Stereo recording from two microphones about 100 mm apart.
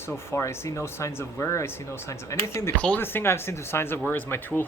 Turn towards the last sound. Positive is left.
turn(degrees=20)  # may be behind; listen again after turning